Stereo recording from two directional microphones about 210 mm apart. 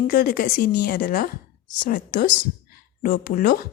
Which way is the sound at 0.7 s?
50° left (ahead or behind).